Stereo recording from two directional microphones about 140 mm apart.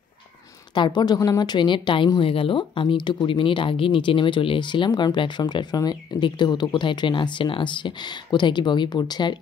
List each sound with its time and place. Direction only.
0.7 s a woman's voice: 30° left (ahead or behind)